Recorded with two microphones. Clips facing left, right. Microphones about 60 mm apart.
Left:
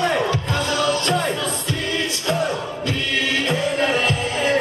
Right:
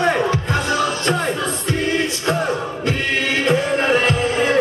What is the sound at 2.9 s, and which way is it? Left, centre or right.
Music, right.